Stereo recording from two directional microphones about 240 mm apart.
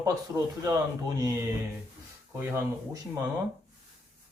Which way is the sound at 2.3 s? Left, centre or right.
Centre.